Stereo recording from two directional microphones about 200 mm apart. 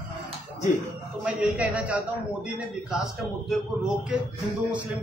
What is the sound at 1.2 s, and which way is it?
Speech, 5° right (ahead or behind).